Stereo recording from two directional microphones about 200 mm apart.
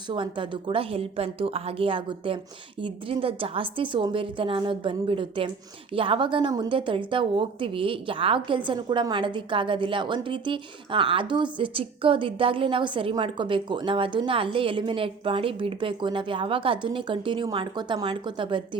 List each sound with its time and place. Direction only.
0.1 s a woman's voice: 25° right (ahead or behind)